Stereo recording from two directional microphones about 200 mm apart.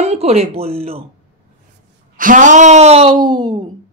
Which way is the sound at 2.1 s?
40° right (ahead or behind).